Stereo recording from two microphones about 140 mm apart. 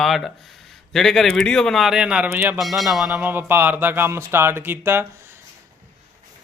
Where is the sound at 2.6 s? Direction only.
Centre (ahead or behind); by 5.4 s 15° right (ahead or behind).